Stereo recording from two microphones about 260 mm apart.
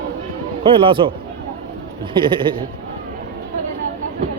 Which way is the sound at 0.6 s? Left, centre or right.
Centre.